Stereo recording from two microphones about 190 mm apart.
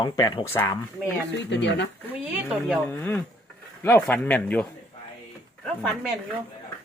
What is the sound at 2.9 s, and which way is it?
Speech, 10° left (ahead or behind).